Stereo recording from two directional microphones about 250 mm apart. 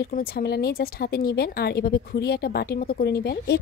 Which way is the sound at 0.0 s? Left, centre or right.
Left.